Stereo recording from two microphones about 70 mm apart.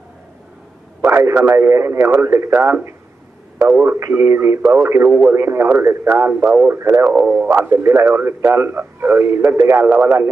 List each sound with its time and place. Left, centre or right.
1.0 s speech: right
6.1 s speech: right
6.7 s speech: right
7.4 s speech: right